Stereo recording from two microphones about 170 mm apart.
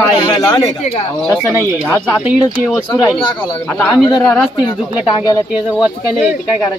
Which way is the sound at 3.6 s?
5° left (ahead or behind).